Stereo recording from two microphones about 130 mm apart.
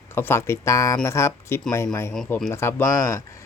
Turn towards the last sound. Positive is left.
turn(degrees=20)  # may be behind; listen again after turning